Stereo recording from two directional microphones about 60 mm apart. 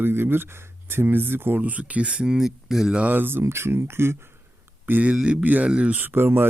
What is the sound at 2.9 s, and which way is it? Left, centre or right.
Speech, right.